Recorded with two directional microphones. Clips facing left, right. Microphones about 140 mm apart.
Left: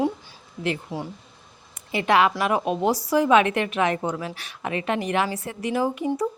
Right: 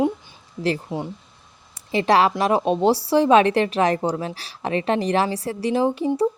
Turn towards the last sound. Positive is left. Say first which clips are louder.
# right 4 dB
turn(degrees=-30)  # may be behind; listen again after turning